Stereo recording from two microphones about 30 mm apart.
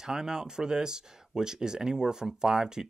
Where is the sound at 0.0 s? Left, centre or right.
Centre.